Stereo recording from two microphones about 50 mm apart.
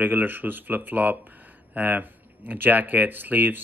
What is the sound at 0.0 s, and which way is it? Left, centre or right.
Speech, right.